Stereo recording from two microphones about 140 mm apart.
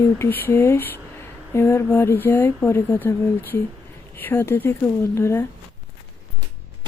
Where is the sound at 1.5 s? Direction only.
20° left (ahead or behind).